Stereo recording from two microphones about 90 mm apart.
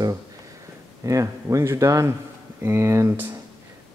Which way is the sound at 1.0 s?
35° right (ahead or behind).